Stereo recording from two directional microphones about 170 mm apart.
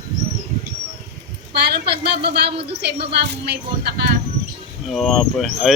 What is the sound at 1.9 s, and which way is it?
Speech, 75° right (ahead or behind).